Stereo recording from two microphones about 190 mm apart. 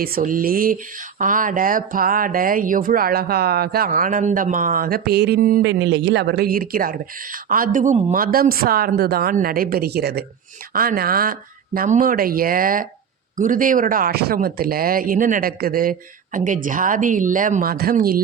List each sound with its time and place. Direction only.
0.0 s speech: 50° right (ahead or behind)
5.6 s speech: 70° right (ahead or behind); by 8.1 s 35° right (ahead or behind)
8.1 s speech: 50° right (ahead or behind)